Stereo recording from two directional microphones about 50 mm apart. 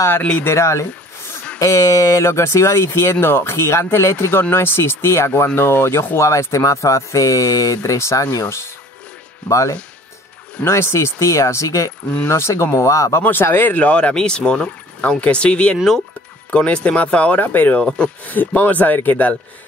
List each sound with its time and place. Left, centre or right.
0.5 s speech: left
1.6 s speech: left
4.4 s speech: left
6.1 s speech: left
10.6 s speech: left
12.3 s speech: left
12.7 s speech: left
13.3 s speech: left
13.7 s speech: left
14.1 s speech: centre
15.0 s speech: left
17.4 s speech: left
17.8 s speech: centre
18.2 s speech: left